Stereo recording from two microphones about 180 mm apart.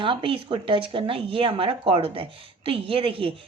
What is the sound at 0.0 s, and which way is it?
Speech, 30° right (ahead or behind).